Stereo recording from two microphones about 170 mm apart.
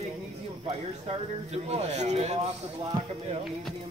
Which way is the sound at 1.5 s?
35° right (ahead or behind).